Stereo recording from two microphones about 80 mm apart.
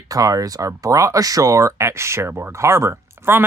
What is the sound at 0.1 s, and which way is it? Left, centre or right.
Speech, right.